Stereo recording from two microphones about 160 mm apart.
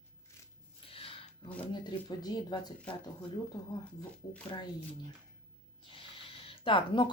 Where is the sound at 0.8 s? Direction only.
35° left (ahead or behind).